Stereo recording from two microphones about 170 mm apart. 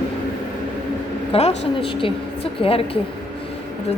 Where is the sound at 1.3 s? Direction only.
35° left (ahead or behind).